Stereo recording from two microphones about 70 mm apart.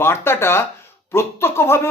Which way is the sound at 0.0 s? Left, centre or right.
Left.